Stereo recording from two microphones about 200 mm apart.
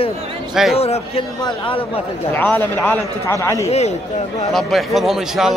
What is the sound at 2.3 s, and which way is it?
A man's voice, 10° left (ahead or behind).